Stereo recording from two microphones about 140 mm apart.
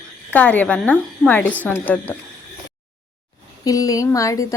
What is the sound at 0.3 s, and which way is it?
A woman's voice, 10° left (ahead or behind).